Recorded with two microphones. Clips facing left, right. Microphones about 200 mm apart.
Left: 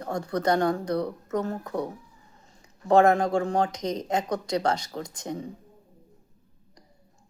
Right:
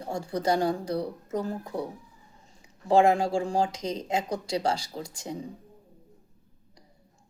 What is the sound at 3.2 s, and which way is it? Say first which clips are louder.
Speech: left 2 dB; 30° right (ahead or behind).